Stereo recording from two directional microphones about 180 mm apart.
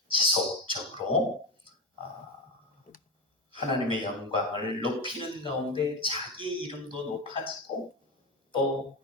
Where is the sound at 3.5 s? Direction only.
30° right (ahead or behind).